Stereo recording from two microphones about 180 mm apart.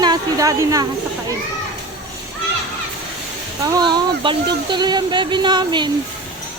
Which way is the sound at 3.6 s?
20° right (ahead or behind).